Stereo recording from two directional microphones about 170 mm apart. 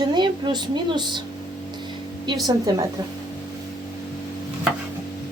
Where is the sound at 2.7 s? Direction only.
25° right (ahead or behind).